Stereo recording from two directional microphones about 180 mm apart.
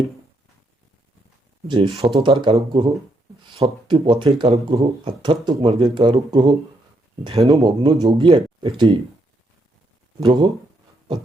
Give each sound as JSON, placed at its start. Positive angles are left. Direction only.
{"t": 1.6, "sound": "speech", "side_deg": -30}
{"t": 10.2, "sound": "speech", "side_deg": -30}